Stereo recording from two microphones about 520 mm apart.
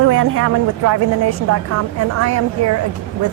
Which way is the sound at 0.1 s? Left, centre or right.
Right.